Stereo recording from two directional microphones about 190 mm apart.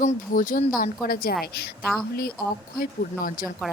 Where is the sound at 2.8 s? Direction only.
45° left (ahead or behind).